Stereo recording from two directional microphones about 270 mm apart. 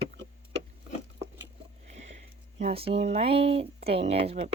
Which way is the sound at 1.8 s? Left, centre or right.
Right.